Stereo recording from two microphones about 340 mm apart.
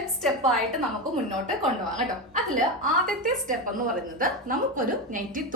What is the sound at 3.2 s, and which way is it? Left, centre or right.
A woman's voice, right.